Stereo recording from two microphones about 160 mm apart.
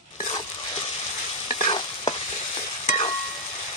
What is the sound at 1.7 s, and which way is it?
Stir, 30° left (ahead or behind).